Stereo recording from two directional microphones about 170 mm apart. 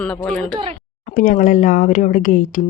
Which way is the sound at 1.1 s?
50° left (ahead or behind).